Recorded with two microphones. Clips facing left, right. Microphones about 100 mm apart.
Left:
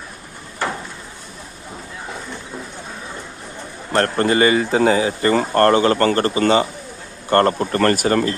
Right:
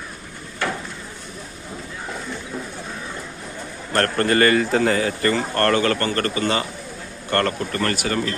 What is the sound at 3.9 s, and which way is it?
Speech, 20° left (ahead or behind).